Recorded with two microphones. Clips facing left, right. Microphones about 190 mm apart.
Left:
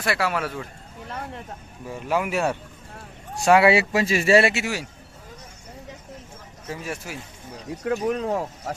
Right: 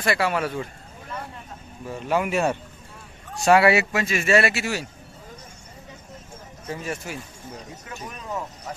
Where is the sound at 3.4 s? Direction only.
15° left (ahead or behind).